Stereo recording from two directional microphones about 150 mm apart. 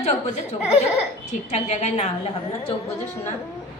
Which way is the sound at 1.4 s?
50° left (ahead or behind).